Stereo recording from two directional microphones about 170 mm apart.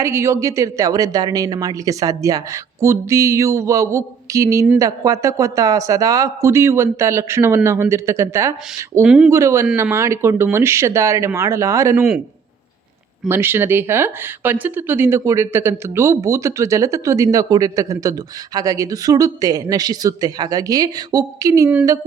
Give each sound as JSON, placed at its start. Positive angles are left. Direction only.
{"t": 0.0, "sound": "a woman's voice", "side_deg": -15}
{"t": 9.0, "sound": "speech", "side_deg": -5}
{"t": 9.3, "sound": "a woman's voice", "side_deg": -15}
{"t": 13.2, "sound": "a woman's voice", "side_deg": -15}